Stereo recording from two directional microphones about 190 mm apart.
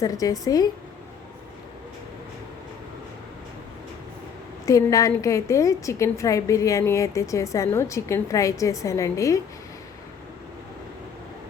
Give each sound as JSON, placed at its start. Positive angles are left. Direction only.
{"t": 0.0, "sound": "speech", "side_deg": 20}
{"t": 4.6, "sound": "a woman's voice", "side_deg": 15}